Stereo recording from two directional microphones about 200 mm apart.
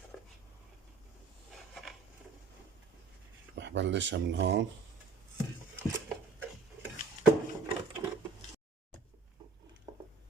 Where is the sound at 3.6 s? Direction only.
60° right (ahead or behind).